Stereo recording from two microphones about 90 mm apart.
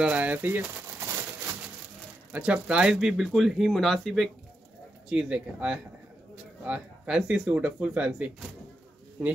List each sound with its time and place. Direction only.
0.0 s speech: 15° right (ahead or behind)
2.3 s speech: 15° right (ahead or behind); by 4.3 s 5° left (ahead or behind)
5.1 s speech: 10° right (ahead or behind)